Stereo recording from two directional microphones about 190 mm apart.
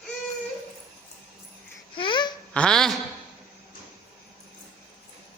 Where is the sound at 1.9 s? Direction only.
25° left (ahead or behind).